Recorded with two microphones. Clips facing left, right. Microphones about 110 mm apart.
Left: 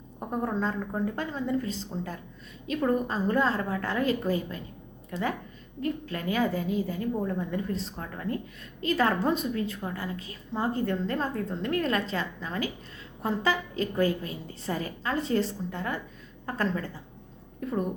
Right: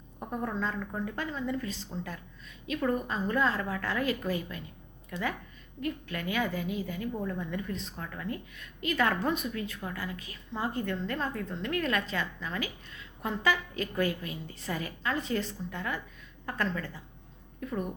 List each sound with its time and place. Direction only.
0.2 s a woman's voice: 30° left (ahead or behind)